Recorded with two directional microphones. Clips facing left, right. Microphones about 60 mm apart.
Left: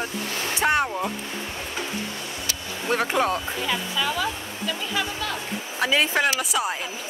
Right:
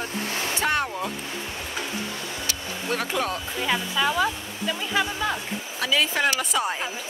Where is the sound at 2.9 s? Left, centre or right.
Left.